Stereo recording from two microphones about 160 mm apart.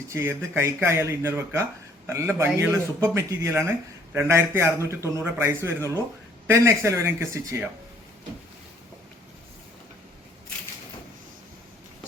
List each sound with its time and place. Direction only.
0.1 s a man's voice: 15° right (ahead or behind)